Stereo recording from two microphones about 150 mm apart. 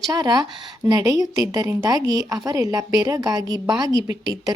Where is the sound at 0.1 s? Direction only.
25° right (ahead or behind).